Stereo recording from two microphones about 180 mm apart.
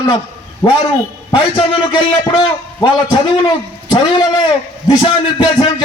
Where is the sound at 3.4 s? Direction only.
20° left (ahead or behind).